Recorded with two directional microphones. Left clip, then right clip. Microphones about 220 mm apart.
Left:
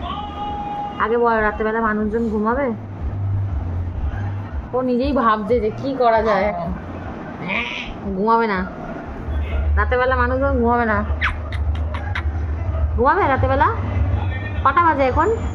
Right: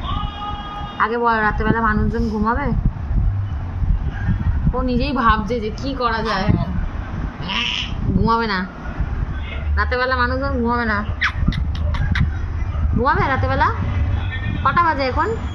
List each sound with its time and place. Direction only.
0.9 s a woman's voice: 25° right (ahead or behind)
4.7 s a woman's voice: 25° right (ahead or behind)
9.8 s a woman's voice: 20° right (ahead or behind)
13.0 s a woman's voice: 25° right (ahead or behind)